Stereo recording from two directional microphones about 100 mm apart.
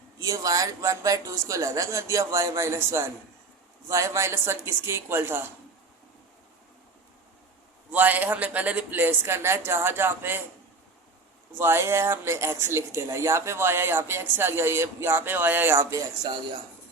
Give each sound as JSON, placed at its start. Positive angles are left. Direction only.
{"t": 0.2, "sound": "speech", "side_deg": -35}
{"t": 7.9, "sound": "speech", "side_deg": -15}
{"t": 11.5, "sound": "speech", "side_deg": -25}